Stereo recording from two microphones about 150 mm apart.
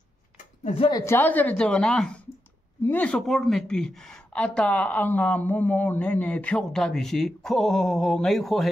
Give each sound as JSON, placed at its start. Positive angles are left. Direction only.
{"t": 0.7, "sound": "speech", "side_deg": 30}
{"t": 1.0, "sound": "a woman's voice", "side_deg": 15}